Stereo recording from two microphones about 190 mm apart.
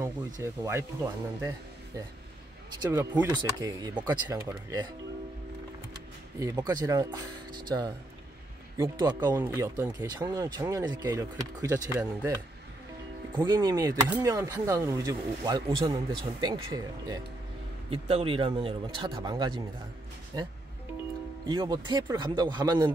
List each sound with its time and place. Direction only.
0.0 s speech: 15° right (ahead or behind)
2.8 s speech: 15° right (ahead or behind)
6.4 s speech: 20° right (ahead or behind)
13.3 s speech: 25° right (ahead or behind)
17.8 s speech: 30° right (ahead or behind)